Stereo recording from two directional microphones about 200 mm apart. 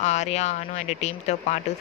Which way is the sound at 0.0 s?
35° left (ahead or behind).